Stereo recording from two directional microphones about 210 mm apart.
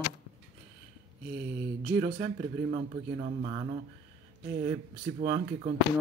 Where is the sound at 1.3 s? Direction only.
25° right (ahead or behind).